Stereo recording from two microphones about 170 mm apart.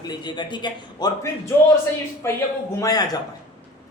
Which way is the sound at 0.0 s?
25° left (ahead or behind).